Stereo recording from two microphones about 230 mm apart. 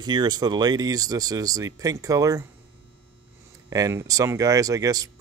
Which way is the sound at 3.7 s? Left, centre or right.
Centre.